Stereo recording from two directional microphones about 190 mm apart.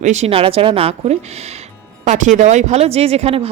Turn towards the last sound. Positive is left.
turn(degrees=-30)  # may be behind; listen again after turning